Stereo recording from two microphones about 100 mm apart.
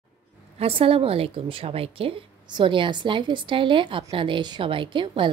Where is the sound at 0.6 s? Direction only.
70° right (ahead or behind).